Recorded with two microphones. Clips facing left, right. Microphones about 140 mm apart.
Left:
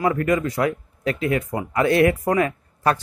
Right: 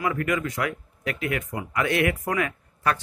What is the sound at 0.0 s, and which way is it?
Speech, 35° left (ahead or behind).